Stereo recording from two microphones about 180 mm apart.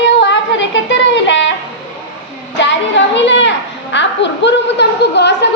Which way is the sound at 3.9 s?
80° left.